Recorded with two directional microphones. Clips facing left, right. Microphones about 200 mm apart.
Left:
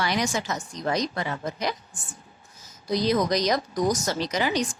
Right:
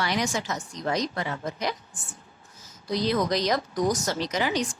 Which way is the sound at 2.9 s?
15° left (ahead or behind).